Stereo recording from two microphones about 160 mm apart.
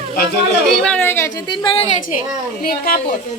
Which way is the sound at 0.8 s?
10° left (ahead or behind).